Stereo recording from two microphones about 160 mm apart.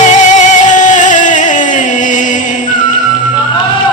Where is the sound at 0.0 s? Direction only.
50° left (ahead or behind).